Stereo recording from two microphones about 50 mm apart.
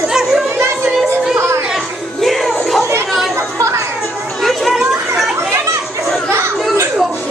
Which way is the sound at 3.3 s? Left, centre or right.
Right.